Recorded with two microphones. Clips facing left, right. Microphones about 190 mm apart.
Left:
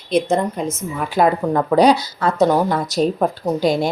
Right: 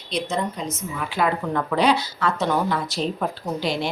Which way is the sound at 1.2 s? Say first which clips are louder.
Left 7 dB; 40° left (ahead or behind).